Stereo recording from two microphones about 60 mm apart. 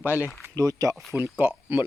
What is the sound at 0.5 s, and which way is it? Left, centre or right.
Speech, right.